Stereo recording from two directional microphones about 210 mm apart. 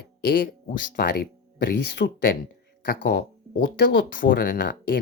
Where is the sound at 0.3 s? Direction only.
40° left (ahead or behind).